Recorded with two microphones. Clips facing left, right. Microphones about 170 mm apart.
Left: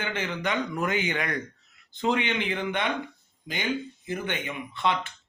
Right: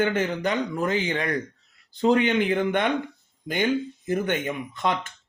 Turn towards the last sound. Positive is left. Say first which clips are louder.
# right 1 dB
turn(degrees=-45)  # may be behind; listen again after turning